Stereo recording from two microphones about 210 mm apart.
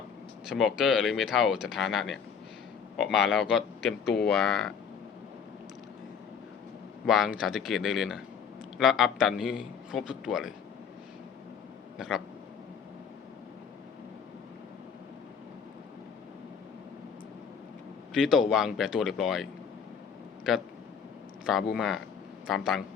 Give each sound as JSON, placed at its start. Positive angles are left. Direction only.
{"t": 0.4, "sound": "a man's voice", "side_deg": 0}
{"t": 7.0, "sound": "a man's voice", "side_deg": 0}
{"t": 11.9, "sound": "speech", "side_deg": 0}
{"t": 18.1, "sound": "a man's voice", "side_deg": 0}
{"t": 20.5, "sound": "a man's voice", "side_deg": 0}